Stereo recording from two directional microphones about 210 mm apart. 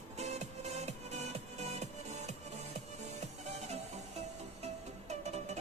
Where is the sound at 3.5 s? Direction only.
30° right (ahead or behind).